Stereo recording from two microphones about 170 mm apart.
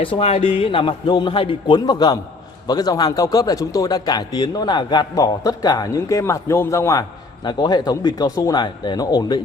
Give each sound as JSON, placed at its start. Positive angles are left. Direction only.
{"t": 0.0, "sound": "a man's voice", "side_deg": 35}